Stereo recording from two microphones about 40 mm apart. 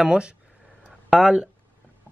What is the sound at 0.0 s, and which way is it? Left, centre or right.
Speech, right.